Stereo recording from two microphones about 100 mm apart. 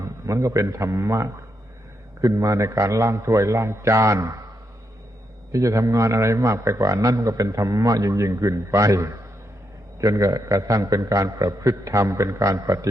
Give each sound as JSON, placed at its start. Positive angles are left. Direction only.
{"t": 0.0, "sound": "a man's voice", "side_deg": -30}
{"t": 5.5, "sound": "a man's voice", "side_deg": -35}